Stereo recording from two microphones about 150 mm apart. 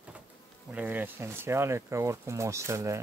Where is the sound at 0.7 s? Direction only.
10° right (ahead or behind).